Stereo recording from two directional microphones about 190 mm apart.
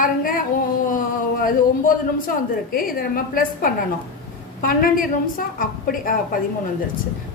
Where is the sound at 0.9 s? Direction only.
50° left (ahead or behind).